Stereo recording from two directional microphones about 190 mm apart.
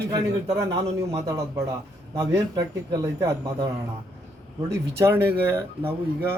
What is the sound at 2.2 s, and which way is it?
Speech, 20° right (ahead or behind).